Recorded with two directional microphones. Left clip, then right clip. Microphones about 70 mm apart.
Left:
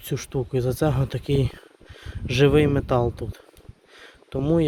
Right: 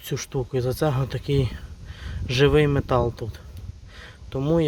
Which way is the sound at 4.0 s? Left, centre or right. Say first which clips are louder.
Left 1 dB; left.